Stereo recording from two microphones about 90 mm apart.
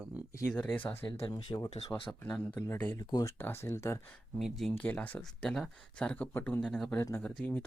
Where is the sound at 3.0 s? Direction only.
50° left (ahead or behind).